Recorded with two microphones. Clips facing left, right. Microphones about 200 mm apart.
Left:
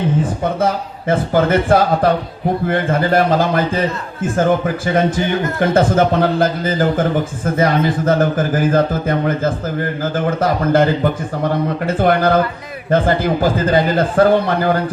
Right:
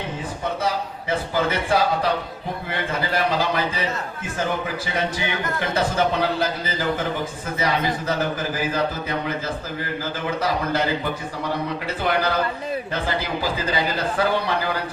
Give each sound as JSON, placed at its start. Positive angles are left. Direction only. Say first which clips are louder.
{"t": 0.6, "sound": "a man's voice", "louder": "left 7 dB", "side_deg": 50}